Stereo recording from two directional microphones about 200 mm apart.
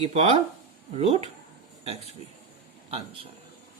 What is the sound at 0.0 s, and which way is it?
Speech, 30° right (ahead or behind).